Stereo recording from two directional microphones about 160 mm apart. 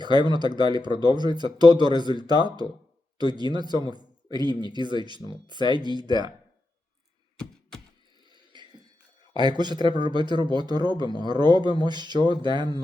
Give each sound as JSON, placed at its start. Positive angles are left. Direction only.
{"t": 0.0, "sound": "a man's voice", "side_deg": -25}
{"t": 8.3, "sound": "a sound", "side_deg": -30}
{"t": 9.3, "sound": "a man's voice", "side_deg": -25}